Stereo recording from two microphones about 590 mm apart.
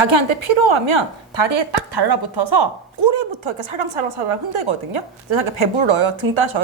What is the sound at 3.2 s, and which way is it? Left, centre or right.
A woman's voice, right.